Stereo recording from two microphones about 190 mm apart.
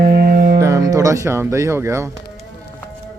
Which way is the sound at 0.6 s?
15° right (ahead or behind).